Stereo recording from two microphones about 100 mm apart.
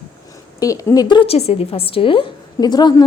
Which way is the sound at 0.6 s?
35° left (ahead or behind).